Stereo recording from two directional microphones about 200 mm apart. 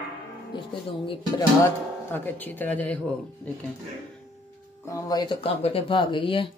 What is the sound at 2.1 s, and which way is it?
Speech, 10° left (ahead or behind).